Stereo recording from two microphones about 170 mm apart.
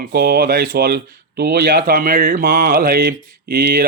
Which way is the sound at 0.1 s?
60° right (ahead or behind).